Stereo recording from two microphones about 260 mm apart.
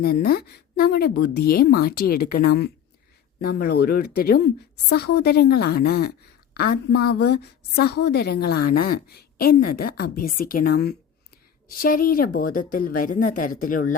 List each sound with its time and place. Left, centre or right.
0.0 s a woman's voice: left